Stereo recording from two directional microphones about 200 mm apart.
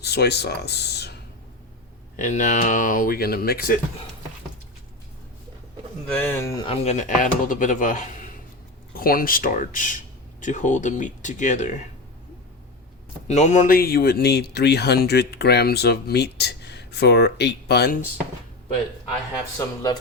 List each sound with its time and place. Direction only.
0.0 s speech: 55° left (ahead or behind)
2.1 s speech: 40° left (ahead or behind)
6.1 s speech: 10° left (ahead or behind); by 11.8 s 35° left (ahead or behind)
13.2 s speech: 35° left (ahead or behind); by 17.9 s 55° left (ahead or behind)
19.5 s speech: 20° left (ahead or behind)